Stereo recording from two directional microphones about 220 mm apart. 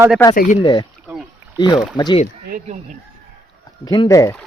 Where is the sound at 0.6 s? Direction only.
20° left (ahead or behind).